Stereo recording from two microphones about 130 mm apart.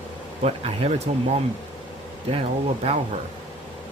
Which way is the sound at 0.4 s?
50° right (ahead or behind).